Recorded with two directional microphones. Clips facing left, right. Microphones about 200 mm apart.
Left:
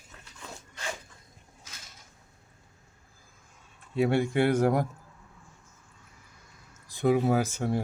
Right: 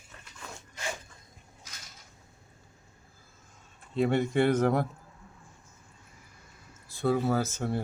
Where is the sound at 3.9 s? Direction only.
10° left (ahead or behind).